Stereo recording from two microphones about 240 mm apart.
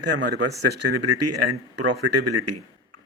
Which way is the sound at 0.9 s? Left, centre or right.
Right.